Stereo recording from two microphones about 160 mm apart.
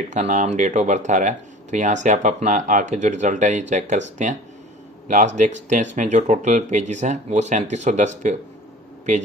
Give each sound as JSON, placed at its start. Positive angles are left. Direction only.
{"t": 0.1, "sound": "speech", "side_deg": -50}